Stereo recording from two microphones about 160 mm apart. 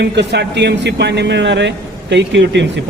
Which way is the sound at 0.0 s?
90° right.